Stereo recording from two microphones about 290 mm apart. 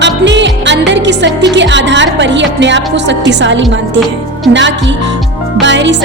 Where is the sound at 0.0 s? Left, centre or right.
Right.